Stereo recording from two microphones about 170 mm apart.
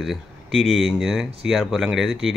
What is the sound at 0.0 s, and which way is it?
Speech, centre (ahead or behind).